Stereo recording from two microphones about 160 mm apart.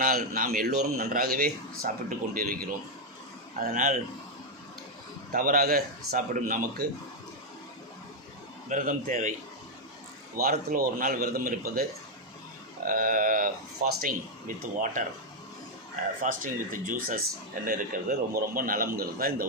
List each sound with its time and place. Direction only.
0.0 s a man's voice: 60° right (ahead or behind)
5.3 s speech: 60° right (ahead or behind)
8.7 s a man's voice: 55° right (ahead or behind)
10.3 s speech: 65° right (ahead or behind)
16.2 s speech: 55° right (ahead or behind)